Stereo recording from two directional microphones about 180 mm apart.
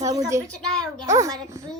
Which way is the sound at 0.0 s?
20° right (ahead or behind).